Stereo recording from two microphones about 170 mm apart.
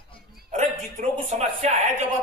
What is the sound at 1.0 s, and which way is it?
Speech, 45° right (ahead or behind).